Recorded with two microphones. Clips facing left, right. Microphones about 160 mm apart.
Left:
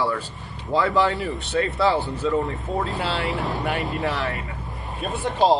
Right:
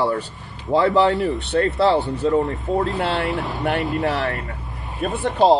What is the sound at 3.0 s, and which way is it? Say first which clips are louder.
Speech: right 4 dB; 55° right (ahead or behind).